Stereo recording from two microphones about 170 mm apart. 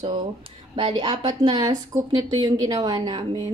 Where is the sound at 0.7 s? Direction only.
25° right (ahead or behind).